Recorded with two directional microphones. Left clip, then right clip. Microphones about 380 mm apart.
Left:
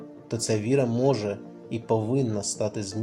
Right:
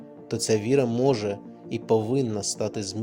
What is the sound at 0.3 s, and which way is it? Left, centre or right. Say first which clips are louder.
Speech: right 2 dB; right.